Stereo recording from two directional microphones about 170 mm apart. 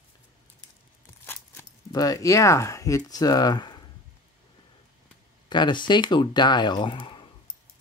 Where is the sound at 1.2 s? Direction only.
15° left (ahead or behind).